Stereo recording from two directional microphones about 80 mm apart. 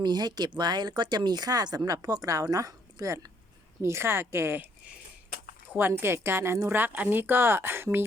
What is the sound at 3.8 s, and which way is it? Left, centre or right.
A woman's voice, right.